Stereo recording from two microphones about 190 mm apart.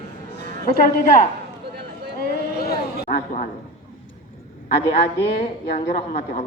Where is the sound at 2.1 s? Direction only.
55° left (ahead or behind).